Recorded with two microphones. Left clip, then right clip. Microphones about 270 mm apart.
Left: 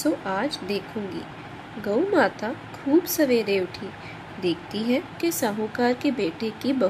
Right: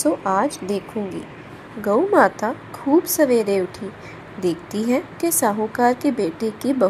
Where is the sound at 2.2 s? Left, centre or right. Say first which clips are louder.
Right 6 dB; centre.